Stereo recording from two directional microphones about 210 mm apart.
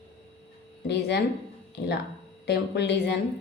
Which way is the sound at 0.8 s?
55° left (ahead or behind).